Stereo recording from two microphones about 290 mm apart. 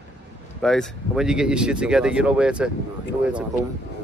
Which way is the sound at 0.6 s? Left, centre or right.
Centre.